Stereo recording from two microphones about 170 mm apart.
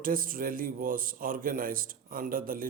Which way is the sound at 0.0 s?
55° right (ahead or behind).